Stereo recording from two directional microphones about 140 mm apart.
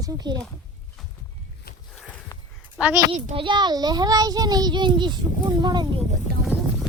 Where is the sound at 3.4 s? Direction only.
35° right (ahead or behind).